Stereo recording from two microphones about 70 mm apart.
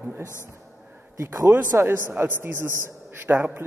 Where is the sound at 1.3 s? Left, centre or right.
Right.